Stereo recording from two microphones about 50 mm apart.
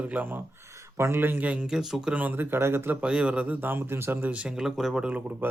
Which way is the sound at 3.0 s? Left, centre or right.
Right.